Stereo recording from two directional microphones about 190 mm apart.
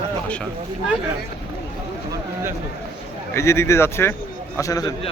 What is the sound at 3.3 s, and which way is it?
Speech, 15° left (ahead or behind).